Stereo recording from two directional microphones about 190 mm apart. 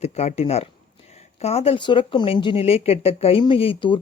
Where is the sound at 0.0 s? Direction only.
35° left (ahead or behind).